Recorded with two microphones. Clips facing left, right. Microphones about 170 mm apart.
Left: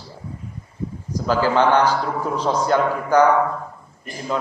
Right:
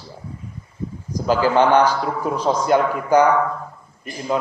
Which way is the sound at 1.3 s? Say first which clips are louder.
Right 2 dB; 15° right (ahead or behind).